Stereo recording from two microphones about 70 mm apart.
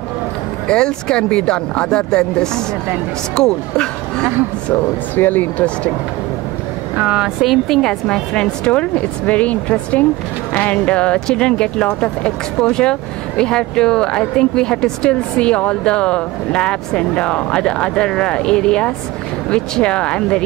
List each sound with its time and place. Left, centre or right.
0.7 s speech: centre
4.7 s speech: left
7.0 s a woman's voice: centre
7.4 s speech: centre